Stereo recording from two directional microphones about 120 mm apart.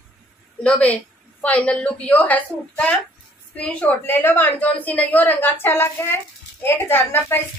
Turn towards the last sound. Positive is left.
turn(degrees=15)  # may be behind; listen again after turning